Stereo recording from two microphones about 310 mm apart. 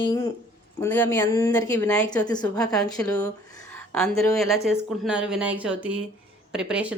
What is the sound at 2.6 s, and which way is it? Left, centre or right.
A woman's voice, centre.